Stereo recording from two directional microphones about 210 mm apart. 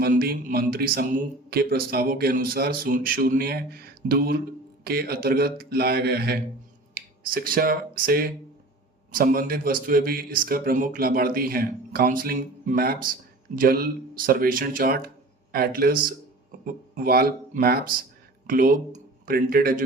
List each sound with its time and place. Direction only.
0.0 s speech: 45° right (ahead or behind)